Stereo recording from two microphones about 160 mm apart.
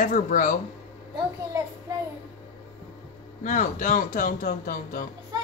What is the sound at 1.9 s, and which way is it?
Child singing, 20° right (ahead or behind).